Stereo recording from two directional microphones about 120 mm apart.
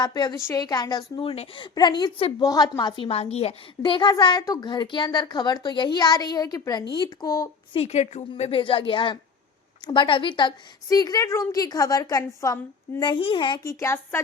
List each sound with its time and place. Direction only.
0.0 s a woman's voice: 35° left (ahead or behind)
1.2 s a woman's voice: 50° left (ahead or behind)
1.7 s a woman's voice: 40° left (ahead or behind)
7.8 s a woman's voice: 60° left (ahead or behind)
8.4 s a woman's voice: 50° left (ahead or behind); by 12.5 s 25° left (ahead or behind)
13.0 s a woman's voice: 40° left (ahead or behind)
13.7 s a woman's voice: 25° left (ahead or behind)